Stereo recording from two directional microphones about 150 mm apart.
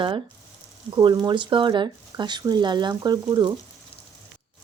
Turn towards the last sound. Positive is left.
turn(degrees=-30)  # may be behind; listen again after turning